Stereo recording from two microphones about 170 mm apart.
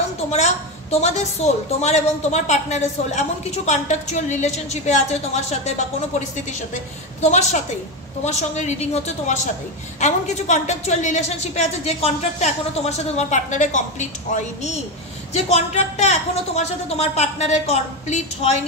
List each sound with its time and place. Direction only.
0.3 s a woman's voice: 40° left (ahead or behind)